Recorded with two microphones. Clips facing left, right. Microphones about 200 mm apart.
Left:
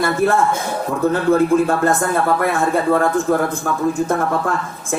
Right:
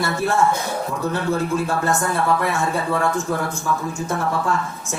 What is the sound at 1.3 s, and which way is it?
A man's voice, 55° left (ahead or behind).